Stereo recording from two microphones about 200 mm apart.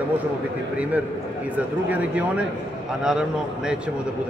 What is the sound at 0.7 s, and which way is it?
A man's voice, 5° right (ahead or behind).